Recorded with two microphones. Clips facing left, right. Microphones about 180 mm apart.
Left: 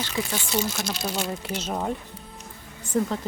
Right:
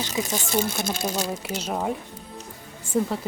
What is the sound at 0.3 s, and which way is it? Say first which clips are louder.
Speech: right 3 dB; 55° right (ahead or behind).